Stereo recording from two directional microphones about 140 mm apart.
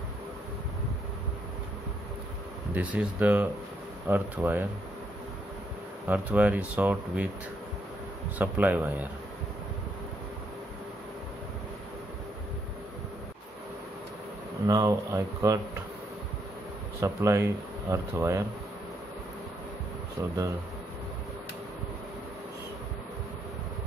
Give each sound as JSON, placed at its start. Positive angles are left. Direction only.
{"t": 2.7, "sound": "speech", "side_deg": -10}
{"t": 6.0, "sound": "speech", "side_deg": -10}
{"t": 8.4, "sound": "speech", "side_deg": -10}
{"t": 14.7, "sound": "speech", "side_deg": -25}
{"t": 17.0, "sound": "speech", "side_deg": -20}